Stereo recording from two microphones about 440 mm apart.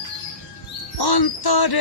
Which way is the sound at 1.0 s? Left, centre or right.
Left.